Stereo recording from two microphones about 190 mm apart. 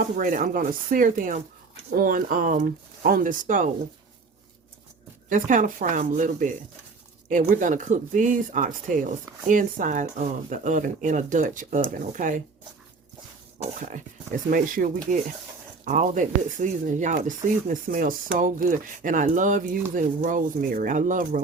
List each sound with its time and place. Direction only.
0.2 s speech: 45° right (ahead or behind)
5.3 s speech: 45° right (ahead or behind)
13.6 s speech: 40° right (ahead or behind)